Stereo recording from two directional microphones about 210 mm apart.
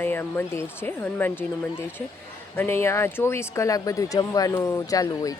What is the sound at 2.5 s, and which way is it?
Speech, 10° left (ahead or behind).